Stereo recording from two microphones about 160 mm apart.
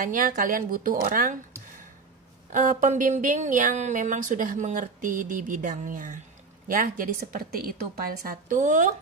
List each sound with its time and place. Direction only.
0.0 s a woman's voice: 60° right (ahead or behind)
2.5 s a woman's voice: 55° right (ahead or behind)